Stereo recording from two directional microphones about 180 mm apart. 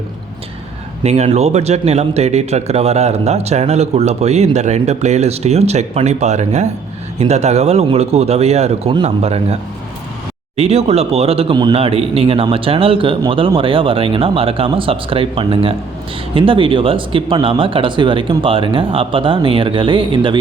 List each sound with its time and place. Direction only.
1.0 s speech: 35° right (ahead or behind)
10.6 s speech: 35° right (ahead or behind)